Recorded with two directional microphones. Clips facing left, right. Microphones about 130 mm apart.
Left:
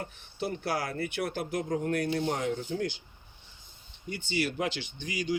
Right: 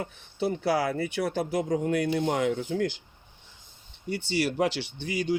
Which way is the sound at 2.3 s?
80° right.